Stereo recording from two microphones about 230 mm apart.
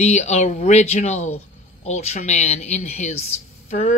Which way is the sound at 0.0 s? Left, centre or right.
Left.